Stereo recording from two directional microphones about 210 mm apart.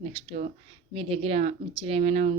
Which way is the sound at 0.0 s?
30° right (ahead or behind).